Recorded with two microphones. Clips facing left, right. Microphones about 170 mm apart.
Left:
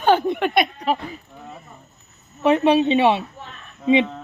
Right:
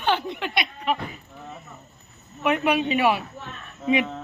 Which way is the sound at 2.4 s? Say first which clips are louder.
Left 6 dB; 30° left (ahead or behind).